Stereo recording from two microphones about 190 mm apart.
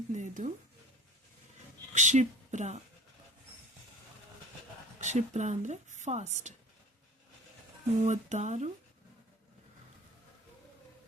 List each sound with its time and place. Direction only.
0.1 s music: 40° right (ahead or behind)
1.9 s speech: 40° right (ahead or behind)
4.9 s speech: 40° right (ahead or behind)
8.0 s speech: 40° right (ahead or behind)